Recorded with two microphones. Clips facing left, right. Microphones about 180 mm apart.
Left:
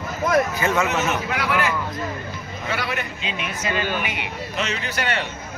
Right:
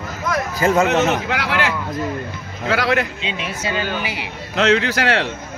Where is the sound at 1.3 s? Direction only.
85° right.